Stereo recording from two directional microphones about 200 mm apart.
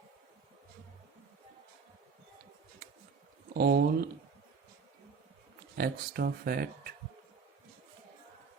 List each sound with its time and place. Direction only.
3.5 s speech: 55° right (ahead or behind)
5.7 s speech: 50° right (ahead or behind)